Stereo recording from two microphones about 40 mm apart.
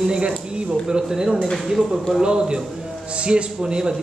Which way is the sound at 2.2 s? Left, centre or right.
Right.